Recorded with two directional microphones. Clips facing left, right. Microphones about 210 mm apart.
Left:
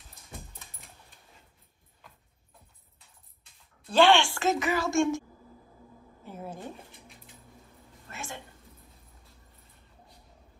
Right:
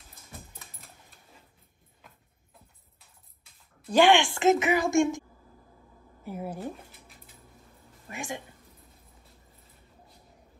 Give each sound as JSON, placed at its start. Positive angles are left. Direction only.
{"t": 3.8, "sound": "a woman's voice", "side_deg": -15}
{"t": 6.2, "sound": "a sound", "side_deg": -10}
{"t": 8.1, "sound": "a woman's voice", "side_deg": -15}